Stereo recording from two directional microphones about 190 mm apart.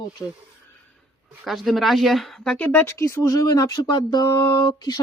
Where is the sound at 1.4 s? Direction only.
Centre (ahead or behind).